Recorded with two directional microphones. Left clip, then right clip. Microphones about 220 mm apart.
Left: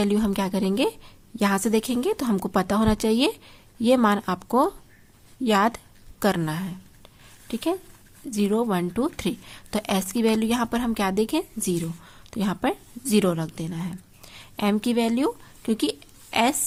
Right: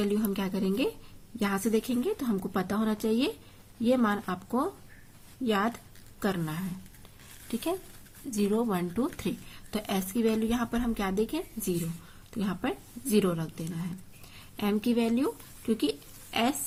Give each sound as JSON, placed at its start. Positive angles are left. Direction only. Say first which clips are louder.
{"t": 0.0, "sound": "a woman's voice", "louder": "left 6 dB", "side_deg": 40}